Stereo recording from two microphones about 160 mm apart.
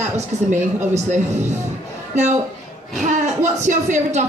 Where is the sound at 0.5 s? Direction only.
50° right (ahead or behind).